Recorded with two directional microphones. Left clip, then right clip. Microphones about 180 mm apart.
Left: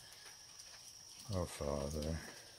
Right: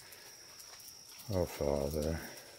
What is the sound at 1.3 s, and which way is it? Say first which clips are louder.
Speech: right 7 dB; 15° right (ahead or behind).